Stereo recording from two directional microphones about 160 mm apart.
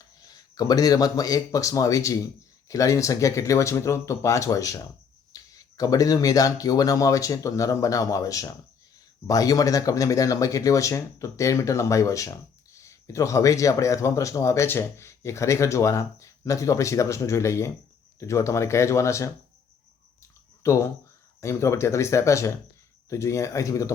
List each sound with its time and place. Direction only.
0.2 s speech: 25° left (ahead or behind)
20.6 s speech: 20° left (ahead or behind)